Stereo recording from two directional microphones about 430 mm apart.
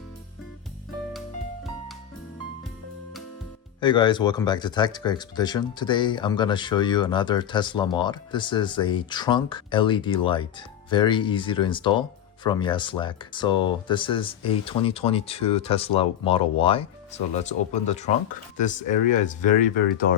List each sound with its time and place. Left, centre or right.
3.8 s speech: centre